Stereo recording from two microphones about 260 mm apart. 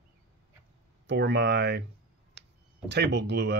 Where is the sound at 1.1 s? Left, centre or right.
Right.